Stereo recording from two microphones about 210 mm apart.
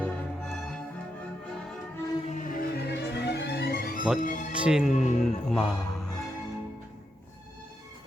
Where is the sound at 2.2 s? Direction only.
35° left (ahead or behind).